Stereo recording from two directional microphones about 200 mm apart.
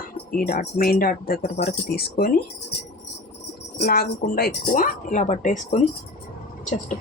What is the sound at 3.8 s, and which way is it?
Speech, 50° left (ahead or behind).